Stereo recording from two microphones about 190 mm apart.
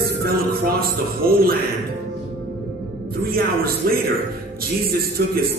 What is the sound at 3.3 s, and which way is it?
A man's voice, 50° right (ahead or behind).